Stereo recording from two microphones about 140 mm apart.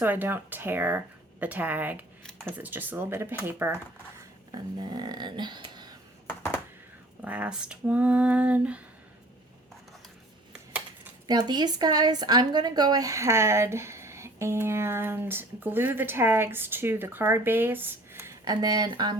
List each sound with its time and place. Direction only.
0.0 s speech: 15° right (ahead or behind)
4.2 s a sound: 30° right (ahead or behind)
6.2 s computer keyboard: 15° left (ahead or behind)
7.2 s speech: 10° right (ahead or behind)
10.5 s a sound: 10° right (ahead or behind)
11.3 s speech: 30° right (ahead or behind)